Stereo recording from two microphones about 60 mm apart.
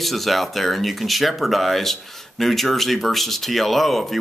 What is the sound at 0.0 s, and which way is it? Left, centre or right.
Speech, centre.